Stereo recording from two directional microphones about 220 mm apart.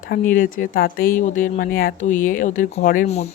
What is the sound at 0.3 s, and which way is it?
Speech, 40° left (ahead or behind).